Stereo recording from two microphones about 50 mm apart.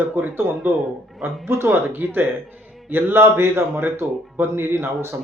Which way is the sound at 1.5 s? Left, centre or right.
Right.